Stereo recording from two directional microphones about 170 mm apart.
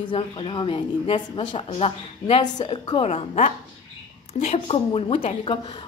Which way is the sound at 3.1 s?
40° left (ahead or behind).